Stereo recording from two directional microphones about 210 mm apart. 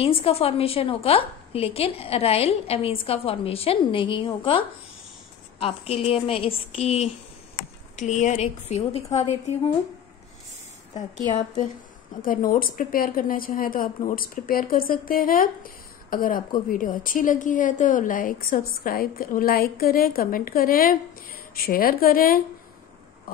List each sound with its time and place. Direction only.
0.0 s a woman's voice: 25° left (ahead or behind)
11.0 s a woman's voice: 35° left (ahead or behind)